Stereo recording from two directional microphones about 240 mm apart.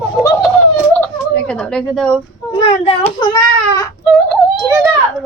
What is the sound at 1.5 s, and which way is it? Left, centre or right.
Speech, centre.